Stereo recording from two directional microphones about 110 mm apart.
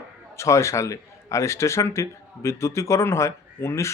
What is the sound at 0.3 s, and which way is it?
A man's voice, 25° left (ahead or behind).